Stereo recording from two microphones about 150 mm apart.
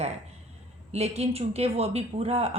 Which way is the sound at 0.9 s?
45° right (ahead or behind).